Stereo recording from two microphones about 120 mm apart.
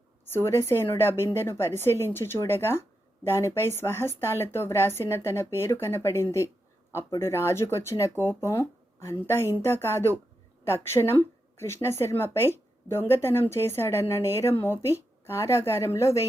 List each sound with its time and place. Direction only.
0.3 s a woman's voice: 20° left (ahead or behind)